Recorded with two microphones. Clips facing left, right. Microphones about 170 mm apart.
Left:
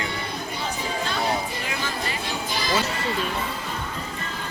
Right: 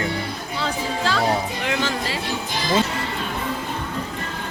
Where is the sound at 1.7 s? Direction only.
75° right (ahead or behind).